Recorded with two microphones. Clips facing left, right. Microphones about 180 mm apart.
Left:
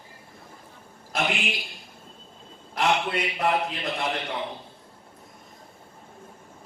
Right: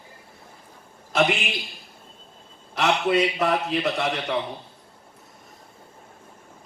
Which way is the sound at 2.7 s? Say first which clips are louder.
Right 4 dB; 70° right (ahead or behind).